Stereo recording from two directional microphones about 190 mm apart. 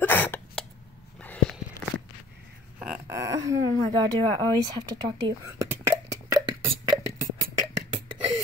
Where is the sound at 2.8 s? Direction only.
5° right (ahead or behind).